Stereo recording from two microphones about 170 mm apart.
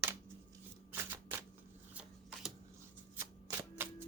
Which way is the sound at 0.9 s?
10° right (ahead or behind).